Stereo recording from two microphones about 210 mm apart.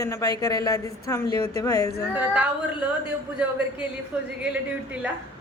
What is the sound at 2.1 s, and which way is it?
Speech, 5° right (ahead or behind).